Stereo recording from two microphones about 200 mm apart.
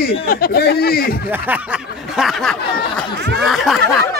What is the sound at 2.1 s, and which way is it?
Speech, centre (ahead or behind).